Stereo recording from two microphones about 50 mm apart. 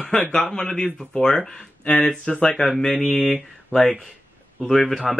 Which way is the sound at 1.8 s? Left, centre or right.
Left.